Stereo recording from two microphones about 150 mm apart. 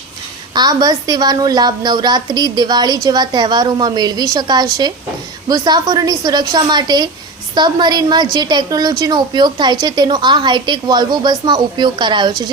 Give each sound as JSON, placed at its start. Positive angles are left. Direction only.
{"t": 0.5, "sound": "a woman's voice", "side_deg": -25}